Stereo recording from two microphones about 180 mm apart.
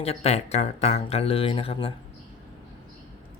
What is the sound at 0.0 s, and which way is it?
Speech, 35° left (ahead or behind).